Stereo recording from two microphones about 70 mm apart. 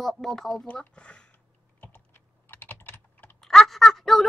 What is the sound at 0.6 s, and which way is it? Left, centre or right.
Speech, centre.